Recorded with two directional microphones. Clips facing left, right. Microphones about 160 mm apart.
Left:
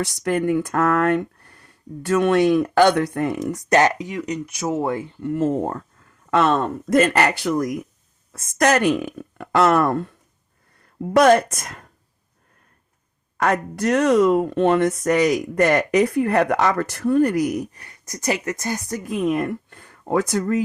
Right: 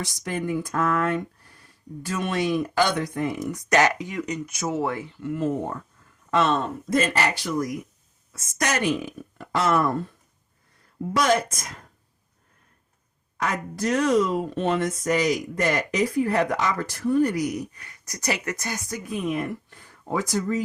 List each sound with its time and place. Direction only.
0.3 s speech: 65° left (ahead or behind)
3.5 s speech: 35° left (ahead or behind)
4.6 s speech: 15° left (ahead or behind)
5.2 s speech: 40° left (ahead or behind)
6.3 s speech: 55° left (ahead or behind)
11.1 s speech: 55° left (ahead or behind)
13.3 s speech: 60° left (ahead or behind); by 19.1 s 40° left (ahead or behind)
19.2 s speech: 55° left (ahead or behind)